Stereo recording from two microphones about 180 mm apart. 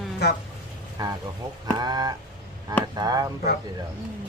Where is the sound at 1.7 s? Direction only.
20° right (ahead or behind).